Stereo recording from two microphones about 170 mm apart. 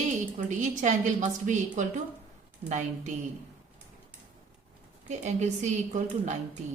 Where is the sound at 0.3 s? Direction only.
45° right (ahead or behind).